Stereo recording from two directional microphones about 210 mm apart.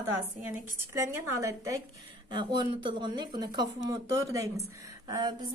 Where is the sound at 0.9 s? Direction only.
15° right (ahead or behind).